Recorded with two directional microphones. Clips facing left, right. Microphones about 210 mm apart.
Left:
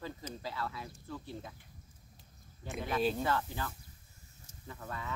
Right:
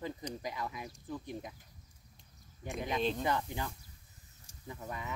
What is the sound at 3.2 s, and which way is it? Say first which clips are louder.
Speech: even; 20° right (ahead or behind).